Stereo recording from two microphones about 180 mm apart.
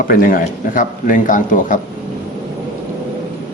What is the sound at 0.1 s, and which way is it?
A man's voice, 50° left (ahead or behind).